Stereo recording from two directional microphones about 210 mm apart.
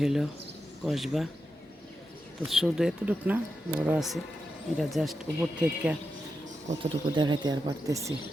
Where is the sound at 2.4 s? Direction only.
Centre (ahead or behind).